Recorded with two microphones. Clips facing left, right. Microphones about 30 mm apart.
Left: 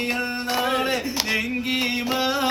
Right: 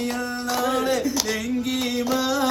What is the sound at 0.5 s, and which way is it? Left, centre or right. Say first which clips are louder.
Music: right 1 dB; left.